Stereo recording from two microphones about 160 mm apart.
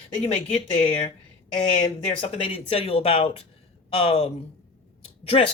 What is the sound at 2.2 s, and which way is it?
Speech, 40° left (ahead or behind).